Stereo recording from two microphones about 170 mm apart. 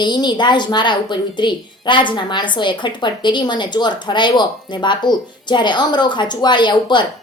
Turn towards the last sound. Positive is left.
turn(degrees=25)  # may be behind; listen again after turning